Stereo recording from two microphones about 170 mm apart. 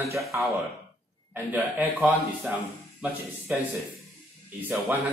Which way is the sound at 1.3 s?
5° right (ahead or behind).